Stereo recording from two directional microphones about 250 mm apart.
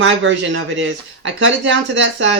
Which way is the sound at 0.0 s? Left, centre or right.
Right.